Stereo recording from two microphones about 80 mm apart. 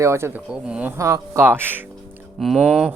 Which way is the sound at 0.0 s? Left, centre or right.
Right.